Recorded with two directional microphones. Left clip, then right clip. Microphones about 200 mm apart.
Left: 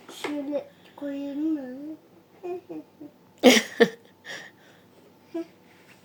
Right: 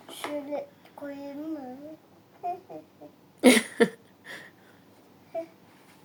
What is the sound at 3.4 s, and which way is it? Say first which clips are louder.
Cough: left 3 dB; 5° right (ahead or behind).